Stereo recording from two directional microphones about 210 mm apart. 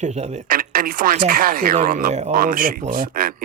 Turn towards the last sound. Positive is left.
turn(degrees=-45)  # may be behind; listen again after turning